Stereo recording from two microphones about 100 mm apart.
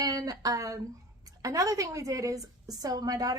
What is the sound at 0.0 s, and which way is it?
A woman's voice, 40° right (ahead or behind).